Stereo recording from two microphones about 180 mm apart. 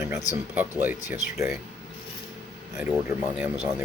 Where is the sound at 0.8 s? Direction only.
10° right (ahead or behind).